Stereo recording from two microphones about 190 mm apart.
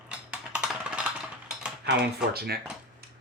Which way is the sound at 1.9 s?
55° right (ahead or behind).